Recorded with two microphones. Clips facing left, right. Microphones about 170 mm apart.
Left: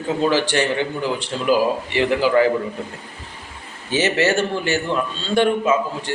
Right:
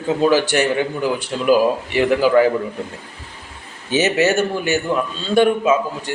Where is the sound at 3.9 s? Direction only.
20° right (ahead or behind).